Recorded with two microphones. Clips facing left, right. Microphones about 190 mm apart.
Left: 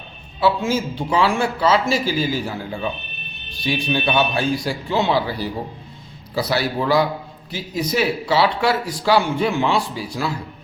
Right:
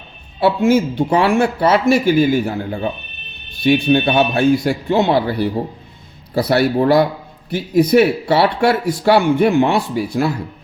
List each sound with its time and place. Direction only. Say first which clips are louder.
0.3 s a man's voice: right 6 dB; 60° right (ahead or behind)